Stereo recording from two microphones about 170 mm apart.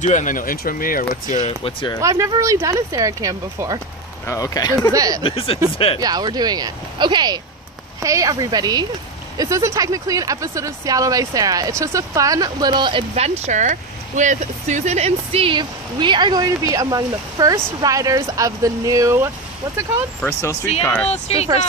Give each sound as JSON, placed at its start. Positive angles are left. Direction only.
{"t": 0.0, "sound": "speech", "side_deg": 45}
{"t": 1.6, "sound": "speech", "side_deg": 30}
{"t": 2.0, "sound": "speech", "side_deg": -15}
{"t": 4.3, "sound": "speech", "side_deg": 20}
{"t": 4.9, "sound": "speech", "side_deg": -20}
{"t": 5.2, "sound": "speech", "side_deg": 35}
{"t": 5.9, "sound": "speech", "side_deg": -25}
{"t": 13.4, "sound": "speech", "side_deg": -45}
{"t": 20.8, "sound": "speech", "side_deg": 5}
{"t": 21.1, "sound": "speech", "side_deg": 40}